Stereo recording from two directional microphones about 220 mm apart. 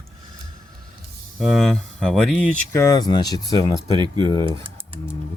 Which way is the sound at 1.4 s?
Centre (ahead or behind).